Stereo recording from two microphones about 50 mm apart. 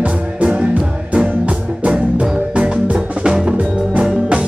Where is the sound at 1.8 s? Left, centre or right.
Right.